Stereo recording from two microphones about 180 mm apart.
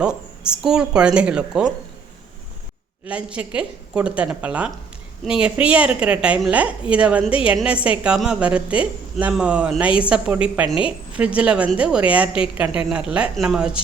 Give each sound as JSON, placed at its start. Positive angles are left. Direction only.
{"t": 0.0, "sound": "a woman's voice", "side_deg": -5}
{"t": 3.1, "sound": "a woman's voice", "side_deg": -5}